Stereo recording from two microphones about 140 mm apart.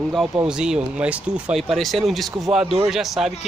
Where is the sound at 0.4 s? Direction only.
5° right (ahead or behind).